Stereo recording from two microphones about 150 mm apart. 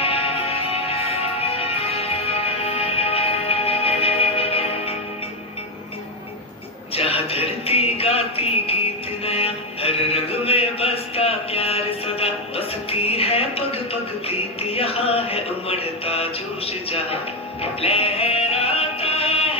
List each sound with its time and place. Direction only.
0.0 s music: 40° left (ahead or behind)
7.0 s music: 40° left (ahead or behind)